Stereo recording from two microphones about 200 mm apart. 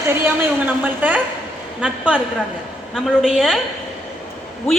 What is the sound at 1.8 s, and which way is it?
A man's voice, 5° right (ahead or behind).